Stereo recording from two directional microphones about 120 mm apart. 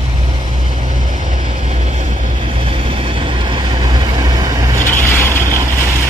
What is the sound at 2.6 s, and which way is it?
Vehicle, 50° right (ahead or behind).